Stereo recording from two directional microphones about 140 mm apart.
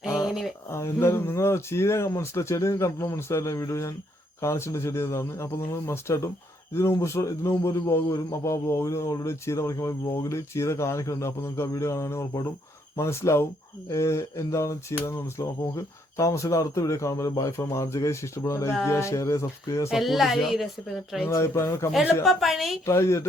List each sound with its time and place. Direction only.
0.7 s a man's voice: 20° left (ahead or behind)
19.9 s speech: centre (ahead or behind)
21.2 s a man's voice: 20° left (ahead or behind)
22.2 s speech: centre (ahead or behind)
22.9 s a man's voice: 20° left (ahead or behind)